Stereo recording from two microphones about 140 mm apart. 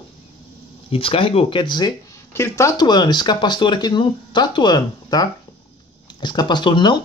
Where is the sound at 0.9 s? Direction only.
40° left (ahead or behind).